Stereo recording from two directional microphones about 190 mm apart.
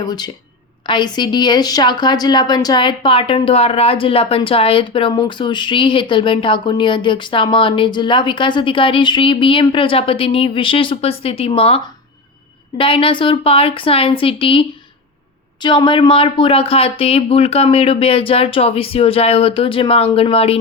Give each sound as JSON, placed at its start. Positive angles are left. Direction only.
{"t": 0.0, "sound": "speech", "side_deg": 20}